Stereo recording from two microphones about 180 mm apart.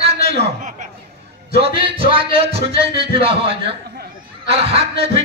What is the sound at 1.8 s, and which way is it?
A man's voice, 30° right (ahead or behind).